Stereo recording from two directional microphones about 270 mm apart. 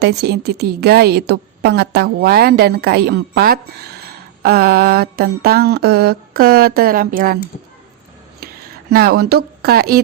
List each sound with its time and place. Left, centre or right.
0.0 s a woman's voice: right
8.4 s a sound: right
8.9 s a woman's voice: right